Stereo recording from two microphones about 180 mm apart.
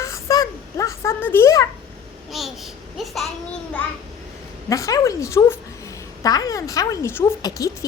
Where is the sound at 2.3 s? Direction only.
Centre (ahead or behind).